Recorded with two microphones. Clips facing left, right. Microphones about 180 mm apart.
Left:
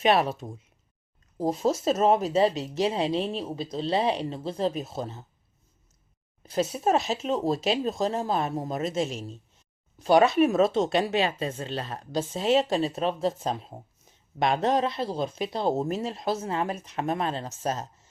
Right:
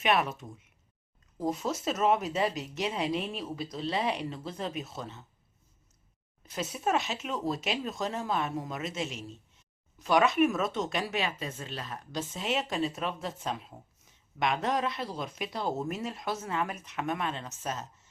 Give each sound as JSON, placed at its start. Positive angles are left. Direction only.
{"t": 0.0, "sound": "speech", "side_deg": 35}
{"t": 6.4, "sound": "speech", "side_deg": 30}